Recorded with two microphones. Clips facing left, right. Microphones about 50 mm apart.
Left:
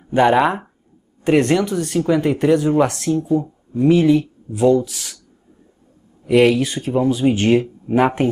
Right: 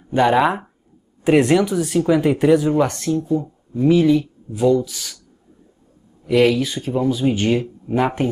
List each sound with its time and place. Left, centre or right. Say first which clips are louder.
0.1 s speech: left 1 dB; centre
3.1 s speech: left 2 dB; centre
3.8 s speech: left 1 dB; centre
6.2 s speech: left 2 dB; centre